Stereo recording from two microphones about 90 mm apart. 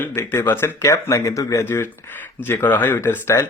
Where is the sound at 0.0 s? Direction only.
25° left (ahead or behind).